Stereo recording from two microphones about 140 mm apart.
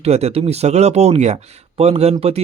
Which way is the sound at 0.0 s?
50° right (ahead or behind).